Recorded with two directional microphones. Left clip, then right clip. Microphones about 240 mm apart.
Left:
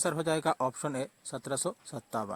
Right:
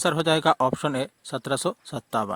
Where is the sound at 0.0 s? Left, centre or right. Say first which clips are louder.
Right 8 dB; right.